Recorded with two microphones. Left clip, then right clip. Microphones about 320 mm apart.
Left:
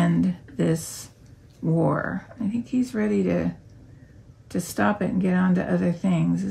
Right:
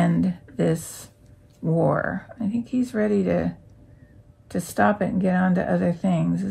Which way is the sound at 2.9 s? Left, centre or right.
Centre.